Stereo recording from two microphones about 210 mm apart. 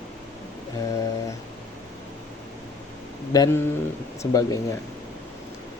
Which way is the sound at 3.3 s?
20° left (ahead or behind).